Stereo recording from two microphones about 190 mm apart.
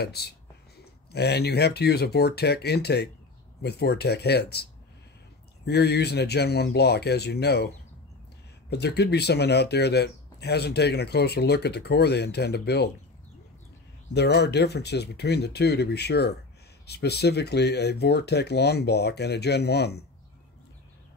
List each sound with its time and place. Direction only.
0.0 s speech: 60° left (ahead or behind)
5.7 s speech: 60° left (ahead or behind)
14.1 s speech: 60° left (ahead or behind)